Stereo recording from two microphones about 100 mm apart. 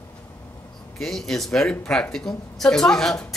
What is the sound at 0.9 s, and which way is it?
A woman's voice, 5° left (ahead or behind).